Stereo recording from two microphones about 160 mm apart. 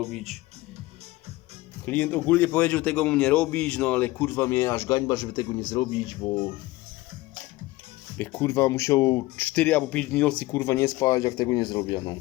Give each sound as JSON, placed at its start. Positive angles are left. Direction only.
{"t": 0.0, "sound": "speech", "side_deg": 0}
{"t": 1.8, "sound": "a man's voice", "side_deg": 10}
{"t": 8.2, "sound": "speech", "side_deg": 10}
{"t": 9.5, "sound": "a man's voice", "side_deg": 10}